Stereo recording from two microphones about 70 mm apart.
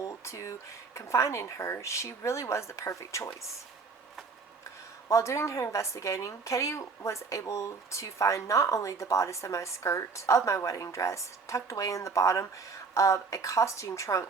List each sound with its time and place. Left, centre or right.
0.0 s a sound: left
0.9 s a woman's voice: left
5.0 s a woman's voice: left